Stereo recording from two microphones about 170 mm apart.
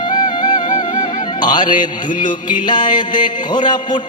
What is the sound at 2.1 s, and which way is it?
Music, 50° left (ahead or behind).